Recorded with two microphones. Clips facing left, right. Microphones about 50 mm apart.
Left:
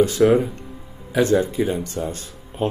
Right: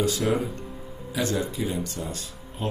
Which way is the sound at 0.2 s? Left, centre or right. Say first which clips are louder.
Left 9 dB; left.